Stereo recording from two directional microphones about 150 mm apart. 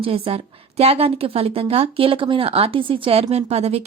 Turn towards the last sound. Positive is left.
turn(degrees=-45)  # may be behind; listen again after turning